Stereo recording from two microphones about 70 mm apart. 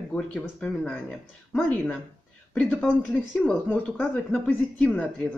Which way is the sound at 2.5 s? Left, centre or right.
Centre.